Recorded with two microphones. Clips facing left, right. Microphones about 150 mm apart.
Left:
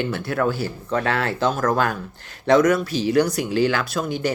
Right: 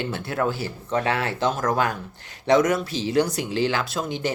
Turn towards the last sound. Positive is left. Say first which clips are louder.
# left 3 dB
turn(degrees=-25)  # may be behind; listen again after turning